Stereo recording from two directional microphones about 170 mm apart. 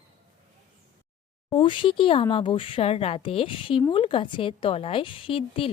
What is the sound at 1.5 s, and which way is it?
A woman's voice, 30° left (ahead or behind).